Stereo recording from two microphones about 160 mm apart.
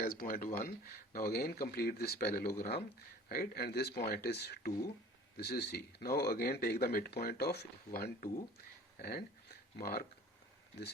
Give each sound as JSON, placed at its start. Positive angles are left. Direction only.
{"t": 0.0, "sound": "speech", "side_deg": 65}
{"t": 5.4, "sound": "speech", "side_deg": 90}
{"t": 7.9, "sound": "speech", "side_deg": 75}